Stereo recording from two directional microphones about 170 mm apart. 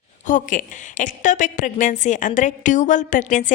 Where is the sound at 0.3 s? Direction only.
50° left (ahead or behind).